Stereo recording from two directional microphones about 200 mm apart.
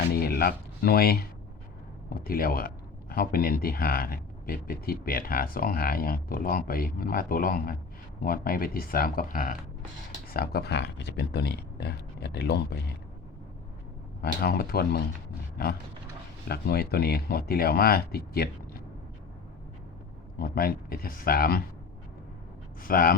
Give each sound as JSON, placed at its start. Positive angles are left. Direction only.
{"t": 0.1, "sound": "speech", "side_deg": 50}
{"t": 14.2, "sound": "speech", "side_deg": 50}
{"t": 16.5, "sound": "speech", "side_deg": 50}
{"t": 20.4, "sound": "speech", "side_deg": 50}
{"t": 22.8, "sound": "speech", "side_deg": 45}